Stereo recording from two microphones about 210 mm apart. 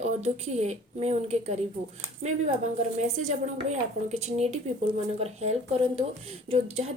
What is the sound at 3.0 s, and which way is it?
A woman's voice, 30° right (ahead or behind).